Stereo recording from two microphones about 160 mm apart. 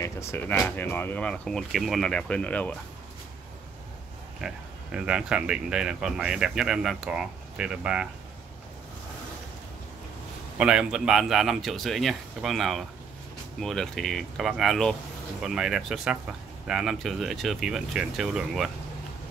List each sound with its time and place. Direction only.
0.0 s speech: 15° left (ahead or behind)
4.4 s speech: 5° right (ahead or behind)
10.6 s speech: 5° right (ahead or behind)